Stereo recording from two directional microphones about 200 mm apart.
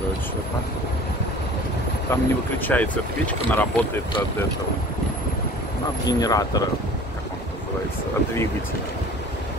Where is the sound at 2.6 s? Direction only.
10° left (ahead or behind).